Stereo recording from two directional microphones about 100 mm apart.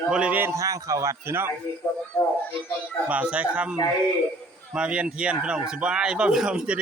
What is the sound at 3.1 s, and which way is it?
A man's voice, 15° right (ahead or behind).